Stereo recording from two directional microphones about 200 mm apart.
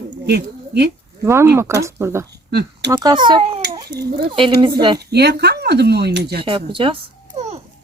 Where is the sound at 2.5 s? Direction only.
55° right (ahead or behind).